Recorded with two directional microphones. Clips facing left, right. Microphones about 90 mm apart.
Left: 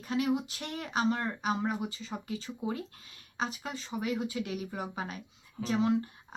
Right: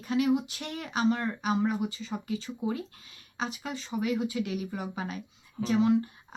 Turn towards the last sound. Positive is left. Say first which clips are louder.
# right 4 dB
turn(degrees=40)  # may be behind; listen again after turning